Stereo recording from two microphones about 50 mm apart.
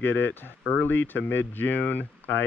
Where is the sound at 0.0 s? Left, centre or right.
Left.